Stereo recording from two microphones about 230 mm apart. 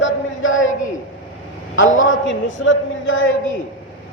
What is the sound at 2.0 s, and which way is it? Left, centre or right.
A man's voice, left.